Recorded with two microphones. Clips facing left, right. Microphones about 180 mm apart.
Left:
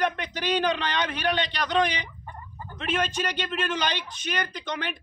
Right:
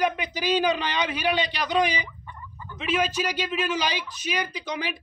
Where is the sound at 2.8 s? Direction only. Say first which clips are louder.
Right 2 dB; 5° right (ahead or behind).